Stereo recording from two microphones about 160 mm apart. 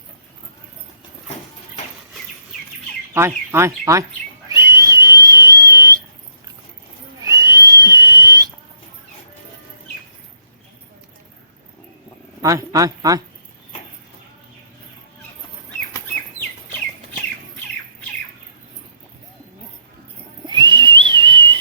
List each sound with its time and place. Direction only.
3.2 s speech: 15° right (ahead or behind)
4.4 s whistle: 20° right (ahead or behind)
7.3 s whistle: 20° right (ahead or behind)
12.4 s speech: 20° right (ahead or behind)
20.5 s whistle: 30° right (ahead or behind)